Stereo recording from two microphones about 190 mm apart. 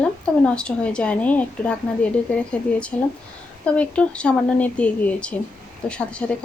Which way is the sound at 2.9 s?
5° left (ahead or behind).